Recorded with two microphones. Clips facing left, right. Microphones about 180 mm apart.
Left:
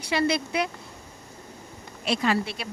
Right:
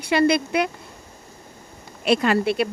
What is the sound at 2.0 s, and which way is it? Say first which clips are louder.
Speech: right 6 dB; 60° right (ahead or behind).